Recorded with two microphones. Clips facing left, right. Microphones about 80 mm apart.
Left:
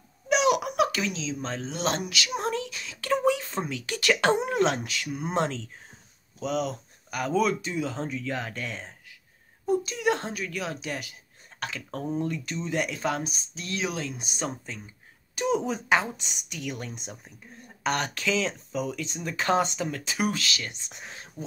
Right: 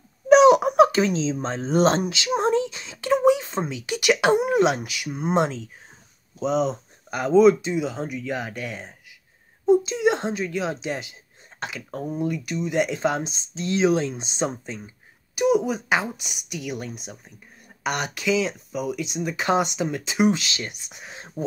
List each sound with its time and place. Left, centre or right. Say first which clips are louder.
0.3 s speech: right 10 dB; right; by 5.1 s centre
5.1 s a woman's voice: right 5 dB; centre
6.4 s a woman's voice: right 6 dB; right
15.3 s a woman's voice: right 6 dB; centre
21.4 s speech: right 10 dB; right